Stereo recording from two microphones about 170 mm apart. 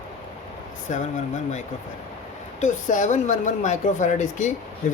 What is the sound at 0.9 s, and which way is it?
Speech, 45° left (ahead or behind).